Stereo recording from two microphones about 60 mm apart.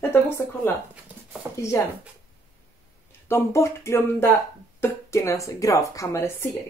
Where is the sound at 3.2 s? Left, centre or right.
Left.